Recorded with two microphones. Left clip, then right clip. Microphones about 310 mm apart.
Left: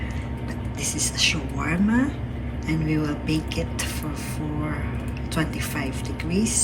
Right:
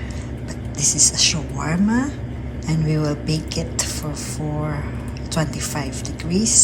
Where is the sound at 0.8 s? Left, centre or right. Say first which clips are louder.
Right 6 dB; centre.